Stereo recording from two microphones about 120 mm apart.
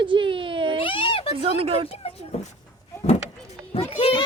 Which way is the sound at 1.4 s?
55° right (ahead or behind).